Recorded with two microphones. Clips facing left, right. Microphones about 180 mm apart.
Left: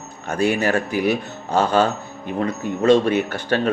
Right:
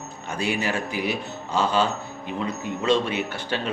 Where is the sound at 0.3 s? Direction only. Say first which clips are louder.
Left 7 dB; 45° left (ahead or behind).